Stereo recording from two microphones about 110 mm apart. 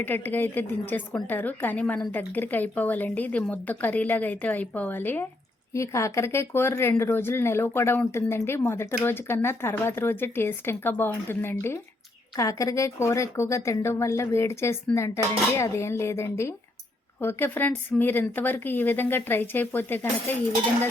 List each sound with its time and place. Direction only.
0.0 s a woman's voice: 20° left (ahead or behind)